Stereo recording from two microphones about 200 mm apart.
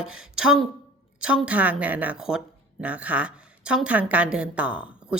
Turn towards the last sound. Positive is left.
turn(degrees=-5)  # may be behind; listen again after turning